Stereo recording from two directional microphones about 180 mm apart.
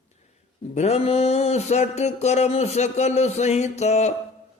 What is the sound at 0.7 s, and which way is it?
Mantra, 35° left (ahead or behind).